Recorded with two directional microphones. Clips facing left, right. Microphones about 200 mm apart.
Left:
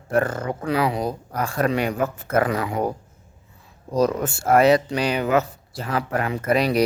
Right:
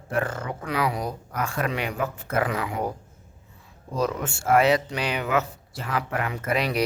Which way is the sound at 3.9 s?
40° left (ahead or behind).